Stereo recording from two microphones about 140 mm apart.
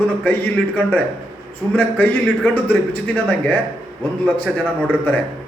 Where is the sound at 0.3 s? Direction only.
10° left (ahead or behind).